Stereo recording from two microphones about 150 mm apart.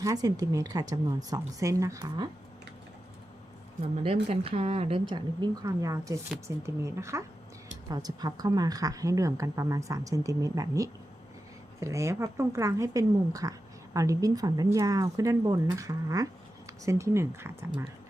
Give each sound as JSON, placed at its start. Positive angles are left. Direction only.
{"t": 0.0, "sound": "a woman's voice", "side_deg": -25}
{"t": 4.0, "sound": "a woman's voice", "side_deg": -40}